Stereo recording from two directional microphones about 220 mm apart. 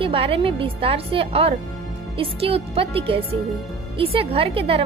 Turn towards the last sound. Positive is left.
turn(degrees=-25)  # may be behind; listen again after turning